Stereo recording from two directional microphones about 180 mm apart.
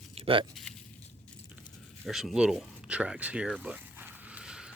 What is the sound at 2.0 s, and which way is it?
Speech, centre (ahead or behind).